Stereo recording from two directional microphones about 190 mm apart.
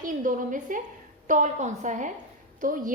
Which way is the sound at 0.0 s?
45° right (ahead or behind).